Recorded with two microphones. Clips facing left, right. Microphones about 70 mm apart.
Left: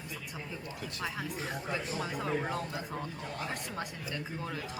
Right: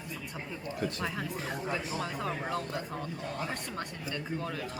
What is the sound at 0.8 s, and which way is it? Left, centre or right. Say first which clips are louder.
Speech: right 7 dB; right.